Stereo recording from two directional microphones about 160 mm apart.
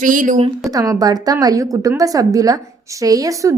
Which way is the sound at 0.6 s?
20° right (ahead or behind).